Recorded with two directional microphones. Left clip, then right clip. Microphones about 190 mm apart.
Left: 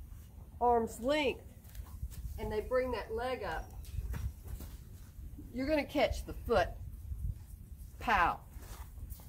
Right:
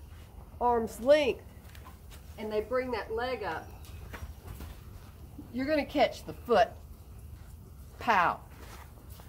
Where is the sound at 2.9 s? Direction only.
30° left (ahead or behind).